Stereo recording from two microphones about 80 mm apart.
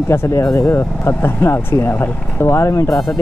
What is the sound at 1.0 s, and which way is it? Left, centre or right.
Speech, left.